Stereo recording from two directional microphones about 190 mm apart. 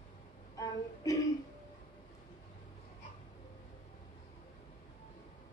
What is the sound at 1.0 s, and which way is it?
Music, 20° left (ahead or behind).